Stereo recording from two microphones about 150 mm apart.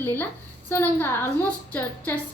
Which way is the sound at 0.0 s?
15° left (ahead or behind).